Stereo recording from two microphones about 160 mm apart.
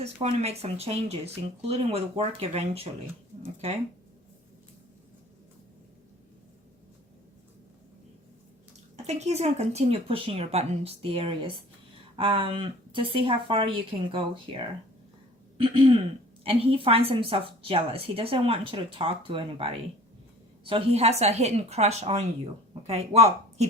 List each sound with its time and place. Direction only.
0.0 s a woman's voice: 40° right (ahead or behind)
9.0 s a woman's voice: 45° right (ahead or behind)